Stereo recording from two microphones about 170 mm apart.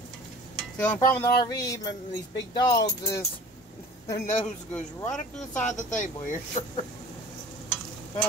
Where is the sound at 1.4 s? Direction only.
20° left (ahead or behind).